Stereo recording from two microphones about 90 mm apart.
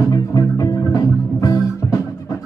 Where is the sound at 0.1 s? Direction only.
40° left (ahead or behind).